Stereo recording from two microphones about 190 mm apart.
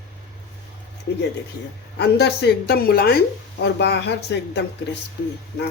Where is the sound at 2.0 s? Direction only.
60° left (ahead or behind).